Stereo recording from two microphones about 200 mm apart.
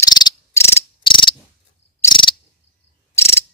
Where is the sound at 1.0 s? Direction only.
25° left (ahead or behind).